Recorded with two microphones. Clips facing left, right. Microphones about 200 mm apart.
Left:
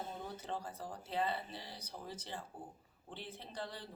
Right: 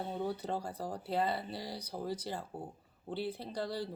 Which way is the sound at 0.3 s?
40° right (ahead or behind).